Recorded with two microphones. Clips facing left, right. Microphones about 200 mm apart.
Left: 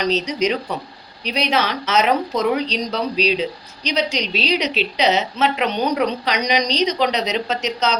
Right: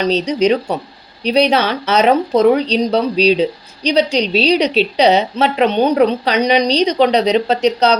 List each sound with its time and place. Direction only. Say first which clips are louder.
0.0 s a woman's voice: right 5 dB; 30° right (ahead or behind)